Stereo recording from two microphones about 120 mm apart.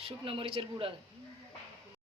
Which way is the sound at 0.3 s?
50° right (ahead or behind).